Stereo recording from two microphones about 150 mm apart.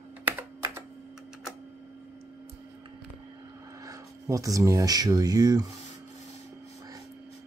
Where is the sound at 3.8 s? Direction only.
25° right (ahead or behind).